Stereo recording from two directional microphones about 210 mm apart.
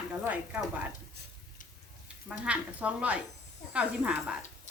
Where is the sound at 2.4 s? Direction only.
5° right (ahead or behind).